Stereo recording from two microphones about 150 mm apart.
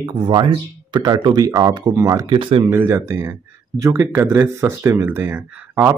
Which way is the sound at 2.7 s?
15° right (ahead or behind).